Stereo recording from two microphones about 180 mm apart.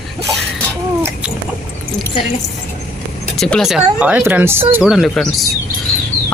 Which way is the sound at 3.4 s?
Centre (ahead or behind).